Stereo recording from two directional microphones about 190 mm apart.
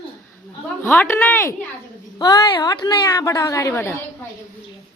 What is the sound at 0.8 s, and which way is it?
A woman's voice, 10° left (ahead or behind).